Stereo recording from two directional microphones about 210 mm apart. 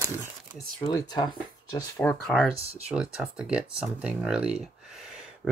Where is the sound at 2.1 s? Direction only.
5° left (ahead or behind).